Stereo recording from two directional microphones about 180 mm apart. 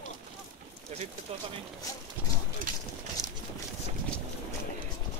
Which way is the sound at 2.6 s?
50° right (ahead or behind).